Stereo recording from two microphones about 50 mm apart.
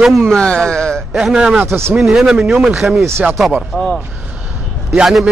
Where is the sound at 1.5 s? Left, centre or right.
Right.